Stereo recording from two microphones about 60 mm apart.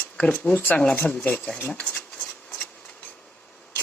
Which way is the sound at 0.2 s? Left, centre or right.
Left.